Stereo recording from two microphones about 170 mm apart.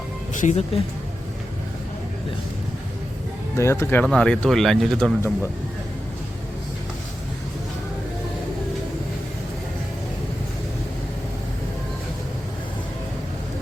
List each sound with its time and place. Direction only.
0.3 s speech: 40° left (ahead or behind)
3.6 s speech: 15° left (ahead or behind); by 5.1 s centre (ahead or behind)